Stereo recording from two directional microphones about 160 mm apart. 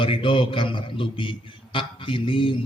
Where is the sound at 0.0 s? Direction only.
35° left (ahead or behind).